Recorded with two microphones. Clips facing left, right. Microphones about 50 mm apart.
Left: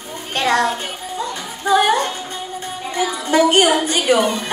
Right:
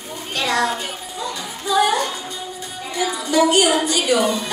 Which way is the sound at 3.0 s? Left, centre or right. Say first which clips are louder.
Left 2 dB; left.